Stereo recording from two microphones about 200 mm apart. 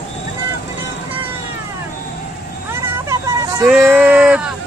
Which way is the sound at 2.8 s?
15° right (ahead or behind).